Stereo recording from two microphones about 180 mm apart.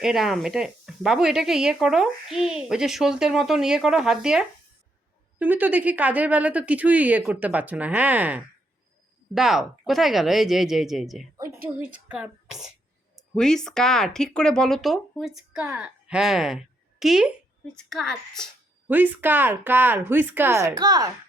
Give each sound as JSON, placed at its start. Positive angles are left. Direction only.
{"t": 0.0, "sound": "speech", "side_deg": 0}
{"t": 11.3, "sound": "a woman's voice", "side_deg": -15}
{"t": 18.9, "sound": "speech", "side_deg": -10}